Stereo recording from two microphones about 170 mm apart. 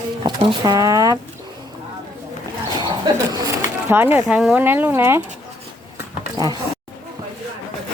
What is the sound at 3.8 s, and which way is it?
Speech, 10° right (ahead or behind).